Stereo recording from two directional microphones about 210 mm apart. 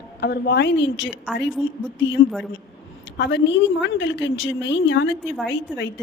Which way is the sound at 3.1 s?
55° left (ahead or behind).